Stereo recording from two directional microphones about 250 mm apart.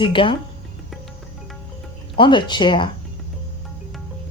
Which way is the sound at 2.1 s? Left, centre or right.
Centre.